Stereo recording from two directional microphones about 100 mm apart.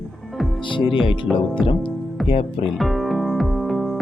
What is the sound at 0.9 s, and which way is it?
Speech, 60° left (ahead or behind).